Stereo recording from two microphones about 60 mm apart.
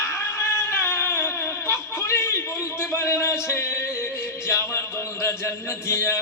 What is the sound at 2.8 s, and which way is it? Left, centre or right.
A man's voice, left.